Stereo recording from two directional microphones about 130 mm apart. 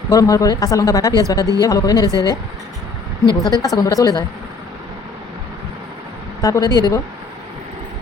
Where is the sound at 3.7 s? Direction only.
25° left (ahead or behind).